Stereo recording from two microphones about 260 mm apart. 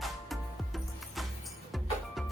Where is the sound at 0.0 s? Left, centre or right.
Centre.